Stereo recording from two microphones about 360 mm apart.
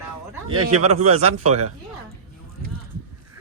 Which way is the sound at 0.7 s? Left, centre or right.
Centre.